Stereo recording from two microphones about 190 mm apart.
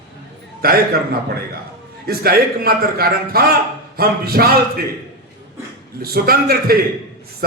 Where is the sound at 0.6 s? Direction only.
55° right (ahead or behind).